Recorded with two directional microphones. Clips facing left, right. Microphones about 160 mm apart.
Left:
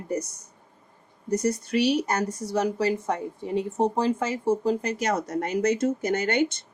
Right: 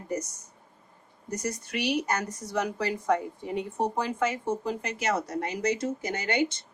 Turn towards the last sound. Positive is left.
turn(degrees=50)  # may be behind; listen again after turning